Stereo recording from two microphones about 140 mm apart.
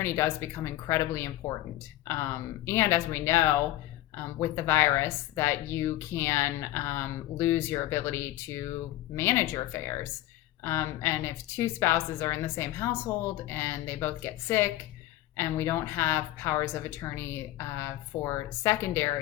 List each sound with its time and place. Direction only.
0.0 s a woman's voice: 20° left (ahead or behind)
2.6 s a woman's voice: 20° left (ahead or behind)